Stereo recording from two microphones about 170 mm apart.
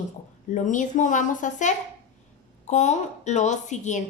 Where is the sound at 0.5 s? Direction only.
50° left (ahead or behind).